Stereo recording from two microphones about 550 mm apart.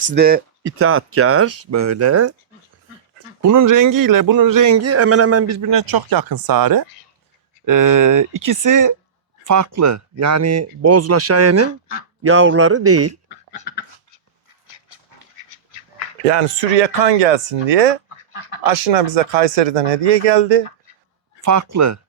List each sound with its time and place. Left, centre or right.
0.1 s speech: centre
3.4 s a man's voice: right
16.7 s speech: right
21.4 s speech: right